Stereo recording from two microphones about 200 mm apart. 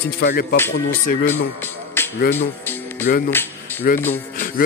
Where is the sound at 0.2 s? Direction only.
45° left (ahead or behind).